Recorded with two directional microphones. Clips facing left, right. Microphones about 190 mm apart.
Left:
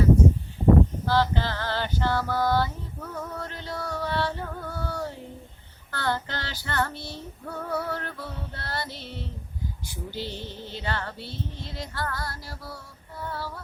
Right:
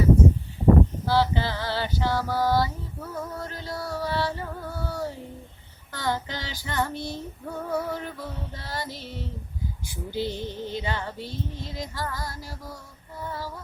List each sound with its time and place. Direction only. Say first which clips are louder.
1.0 s a sound: right 1 dB; 10° right (ahead or behind)
5.9 s female singing: even; 10° right (ahead or behind)
8.9 s child singing: right 2 dB; 40° right (ahead or behind)
9.9 s female singing: right 6 dB; 10° right (ahead or behind)